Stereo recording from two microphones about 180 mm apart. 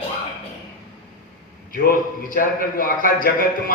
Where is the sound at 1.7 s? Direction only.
50° left (ahead or behind).